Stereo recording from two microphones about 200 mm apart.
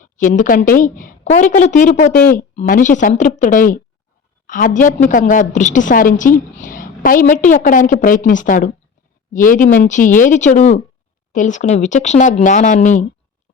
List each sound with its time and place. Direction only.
0.0 s a woman's voice: 40° left (ahead or behind)